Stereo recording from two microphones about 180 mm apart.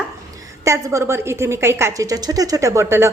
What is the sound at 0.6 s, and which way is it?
A woman's voice, 15° right (ahead or behind).